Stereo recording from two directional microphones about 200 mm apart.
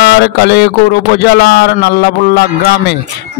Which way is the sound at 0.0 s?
55° left (ahead or behind).